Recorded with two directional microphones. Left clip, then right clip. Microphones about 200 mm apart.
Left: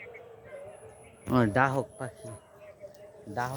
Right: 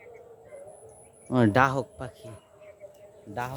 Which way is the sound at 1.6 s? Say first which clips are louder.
Right 4 dB; 40° right (ahead or behind).